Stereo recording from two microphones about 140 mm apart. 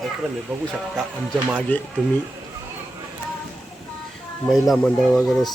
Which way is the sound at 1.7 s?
10° left (ahead or behind).